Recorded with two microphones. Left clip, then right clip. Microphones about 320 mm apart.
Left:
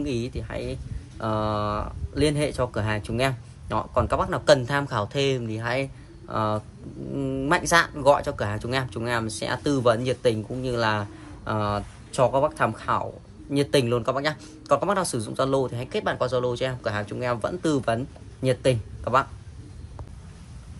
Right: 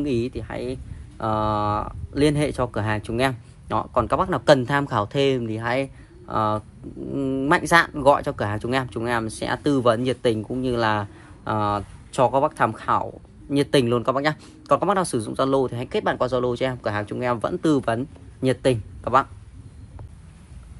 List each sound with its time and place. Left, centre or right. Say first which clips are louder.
0.0 s speech: right 4 dB; centre